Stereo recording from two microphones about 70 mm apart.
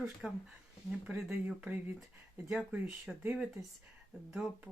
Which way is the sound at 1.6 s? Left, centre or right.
Right.